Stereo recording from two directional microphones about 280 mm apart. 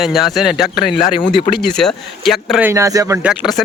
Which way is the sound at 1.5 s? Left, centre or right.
Centre.